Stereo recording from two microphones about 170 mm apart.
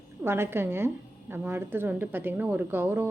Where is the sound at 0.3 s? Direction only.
15° right (ahead or behind).